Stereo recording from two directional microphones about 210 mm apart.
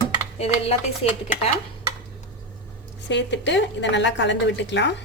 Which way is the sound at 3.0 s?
60° left (ahead or behind).